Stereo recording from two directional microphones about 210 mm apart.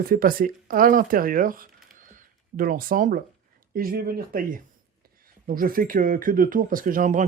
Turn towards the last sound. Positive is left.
turn(degrees=-35)  # may be behind; listen again after turning